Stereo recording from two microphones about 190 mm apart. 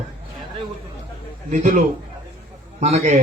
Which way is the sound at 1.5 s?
40° right (ahead or behind).